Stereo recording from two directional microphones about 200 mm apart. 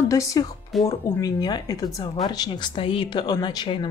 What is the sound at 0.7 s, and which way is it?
Speech, centre (ahead or behind).